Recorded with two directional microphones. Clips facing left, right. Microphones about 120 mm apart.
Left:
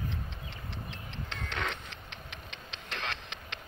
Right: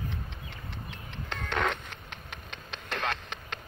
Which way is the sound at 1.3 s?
50° right (ahead or behind).